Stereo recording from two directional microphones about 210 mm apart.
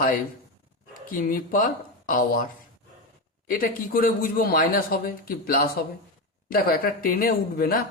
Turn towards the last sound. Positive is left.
turn(degrees=45)  # may be behind; listen again after turning